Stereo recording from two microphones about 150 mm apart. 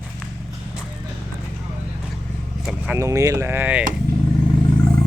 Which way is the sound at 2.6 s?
Centre (ahead or behind).